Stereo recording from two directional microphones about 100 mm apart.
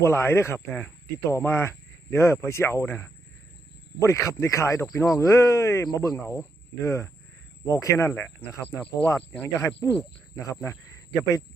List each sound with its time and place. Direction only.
0.0 s speech: 25° left (ahead or behind)